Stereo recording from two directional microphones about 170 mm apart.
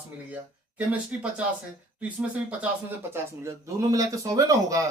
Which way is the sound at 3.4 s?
20° right (ahead or behind).